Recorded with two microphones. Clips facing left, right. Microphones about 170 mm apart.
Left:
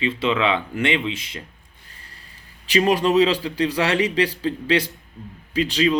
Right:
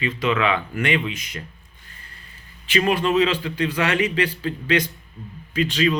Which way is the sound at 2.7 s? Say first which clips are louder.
Left 2 dB; 35° left (ahead or behind).